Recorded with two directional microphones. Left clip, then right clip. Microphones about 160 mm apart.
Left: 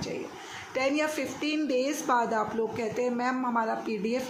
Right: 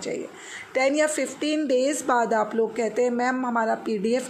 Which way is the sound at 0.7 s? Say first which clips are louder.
Right 6 dB; 40° right (ahead or behind).